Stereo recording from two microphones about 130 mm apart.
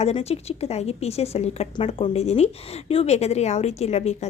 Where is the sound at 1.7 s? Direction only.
40° left (ahead or behind).